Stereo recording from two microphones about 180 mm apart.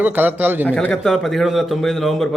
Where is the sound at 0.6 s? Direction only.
5° left (ahead or behind).